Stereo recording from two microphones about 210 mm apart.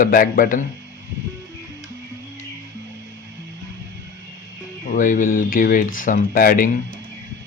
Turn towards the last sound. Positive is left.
turn(degrees=40)  # may be behind; listen again after turning